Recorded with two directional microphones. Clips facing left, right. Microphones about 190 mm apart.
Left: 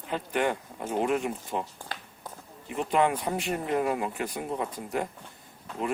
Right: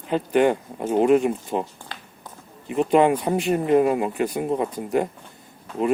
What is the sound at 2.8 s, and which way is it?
Speech, 20° right (ahead or behind).